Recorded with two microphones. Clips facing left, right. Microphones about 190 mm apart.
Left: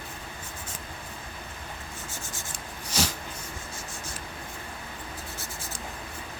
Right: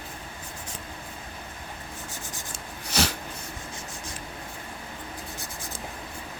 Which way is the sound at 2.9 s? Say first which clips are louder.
Right 3 dB; 65° right (ahead or behind).